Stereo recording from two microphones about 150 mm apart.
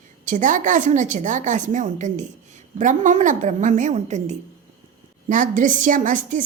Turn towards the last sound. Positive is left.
turn(degrees=-60)  # may be behind; listen again after turning